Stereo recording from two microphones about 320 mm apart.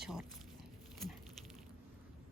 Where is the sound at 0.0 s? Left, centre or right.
Centre.